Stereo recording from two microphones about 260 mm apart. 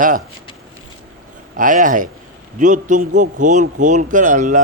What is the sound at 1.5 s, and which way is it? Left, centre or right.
Speech, right.